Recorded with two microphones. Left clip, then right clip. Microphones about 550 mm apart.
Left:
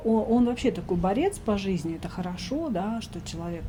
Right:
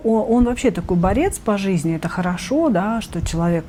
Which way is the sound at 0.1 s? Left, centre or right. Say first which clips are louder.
Right 6 dB; right.